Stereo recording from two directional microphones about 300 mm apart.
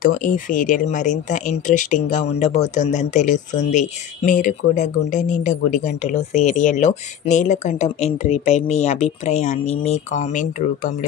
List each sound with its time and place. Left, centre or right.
0.0 s speech: left